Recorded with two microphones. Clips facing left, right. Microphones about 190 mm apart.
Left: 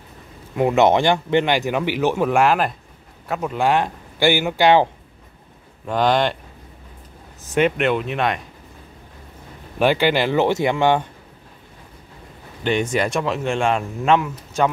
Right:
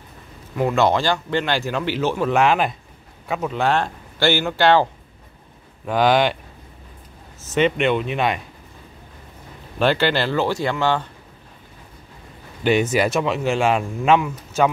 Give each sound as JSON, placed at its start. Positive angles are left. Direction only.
{"t": 0.6, "sound": "speech", "side_deg": 20}
{"t": 5.9, "sound": "speech", "side_deg": -5}
{"t": 7.4, "sound": "speech", "side_deg": 10}
{"t": 9.8, "sound": "speech", "side_deg": 15}
{"t": 12.6, "sound": "speech", "side_deg": -5}